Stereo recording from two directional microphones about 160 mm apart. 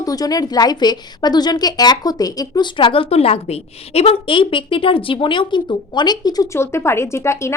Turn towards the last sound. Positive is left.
turn(degrees=15)  # may be behind; listen again after turning